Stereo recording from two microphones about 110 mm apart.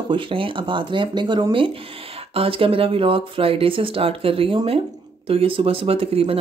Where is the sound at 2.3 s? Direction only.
55° right (ahead or behind).